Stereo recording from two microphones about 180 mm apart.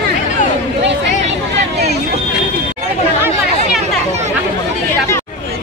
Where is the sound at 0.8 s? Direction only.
80° right.